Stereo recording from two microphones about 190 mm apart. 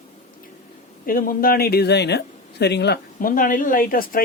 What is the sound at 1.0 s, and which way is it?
Speech, 50° left (ahead or behind).